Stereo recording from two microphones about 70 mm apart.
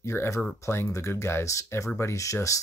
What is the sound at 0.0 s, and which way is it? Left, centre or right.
Speech, left.